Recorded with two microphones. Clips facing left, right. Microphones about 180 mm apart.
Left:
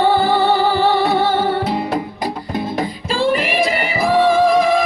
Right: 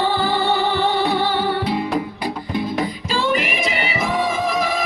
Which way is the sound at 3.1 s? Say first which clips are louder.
Left 5 dB; 30° left (ahead or behind).